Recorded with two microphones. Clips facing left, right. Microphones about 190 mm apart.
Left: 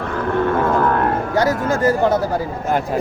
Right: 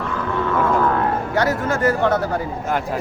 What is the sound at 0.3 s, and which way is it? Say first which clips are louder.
Didgeridoo: left 2 dB; 55° left (ahead or behind).